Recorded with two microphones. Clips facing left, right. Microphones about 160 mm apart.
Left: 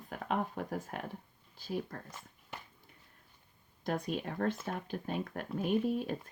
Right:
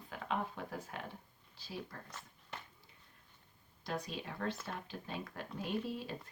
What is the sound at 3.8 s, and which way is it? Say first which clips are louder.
Speech: left 6 dB; 50° left (ahead or behind).